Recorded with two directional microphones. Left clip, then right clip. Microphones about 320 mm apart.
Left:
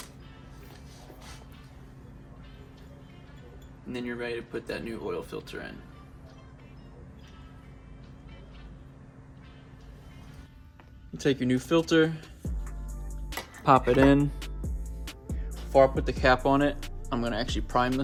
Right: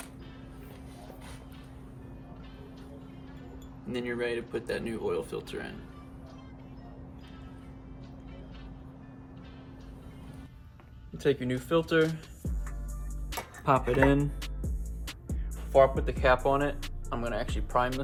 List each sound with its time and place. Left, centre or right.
4.0 s speech: centre
11.2 s speech: left
13.7 s speech: left
14.2 s music: centre
15.7 s speech: left